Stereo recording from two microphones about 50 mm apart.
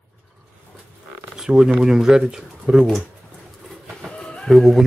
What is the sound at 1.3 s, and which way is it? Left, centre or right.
Speech, centre.